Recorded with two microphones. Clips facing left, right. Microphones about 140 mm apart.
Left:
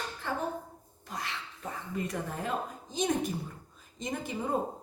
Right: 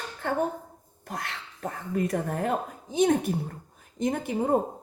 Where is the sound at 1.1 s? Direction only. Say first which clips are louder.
Right 3 dB; 55° right (ahead or behind).